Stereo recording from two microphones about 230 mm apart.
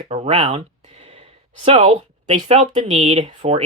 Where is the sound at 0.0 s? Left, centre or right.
Right.